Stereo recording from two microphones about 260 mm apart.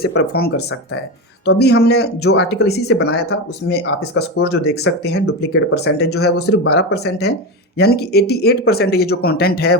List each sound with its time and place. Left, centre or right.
0.0 s speech: left